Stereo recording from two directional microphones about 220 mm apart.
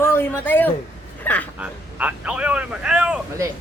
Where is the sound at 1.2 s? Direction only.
5° left (ahead or behind).